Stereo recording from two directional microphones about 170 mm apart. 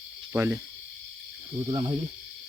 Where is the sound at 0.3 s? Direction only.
15° right (ahead or behind).